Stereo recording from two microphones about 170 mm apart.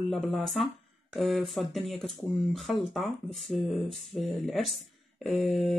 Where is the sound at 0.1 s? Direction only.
Centre (ahead or behind).